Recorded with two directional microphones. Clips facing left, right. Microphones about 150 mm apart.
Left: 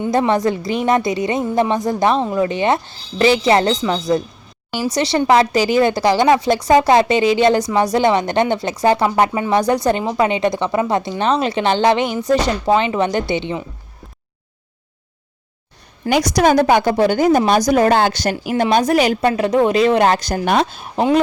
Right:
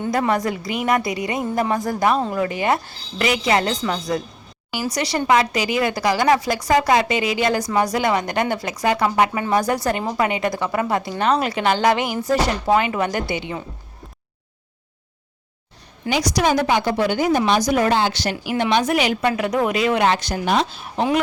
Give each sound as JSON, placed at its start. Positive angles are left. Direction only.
{"t": 0.1, "sound": "a woman's voice", "side_deg": 25}
{"t": 4.8, "sound": "a woman's voice", "side_deg": 25}
{"t": 16.0, "sound": "a woman's voice", "side_deg": 50}
{"t": 20.4, "sound": "a woman's voice", "side_deg": 55}